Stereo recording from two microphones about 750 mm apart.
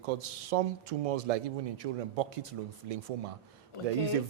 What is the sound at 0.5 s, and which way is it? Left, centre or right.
A man's voice, right.